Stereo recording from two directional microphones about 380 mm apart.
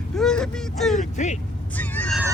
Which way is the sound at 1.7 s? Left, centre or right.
Centre.